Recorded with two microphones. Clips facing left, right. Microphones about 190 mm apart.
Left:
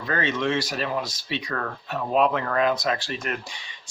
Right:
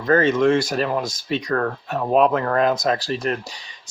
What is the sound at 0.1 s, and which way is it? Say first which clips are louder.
Speech: right 9 dB; 45° right (ahead or behind).